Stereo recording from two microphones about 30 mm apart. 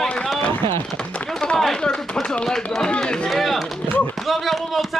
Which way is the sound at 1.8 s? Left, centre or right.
Left.